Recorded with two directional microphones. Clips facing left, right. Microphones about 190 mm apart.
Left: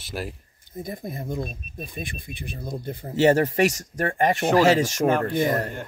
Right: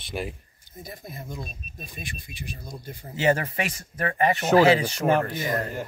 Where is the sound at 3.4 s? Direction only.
40° left (ahead or behind).